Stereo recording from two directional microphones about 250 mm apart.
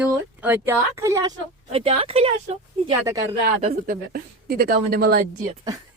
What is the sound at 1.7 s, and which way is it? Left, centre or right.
Speech, right.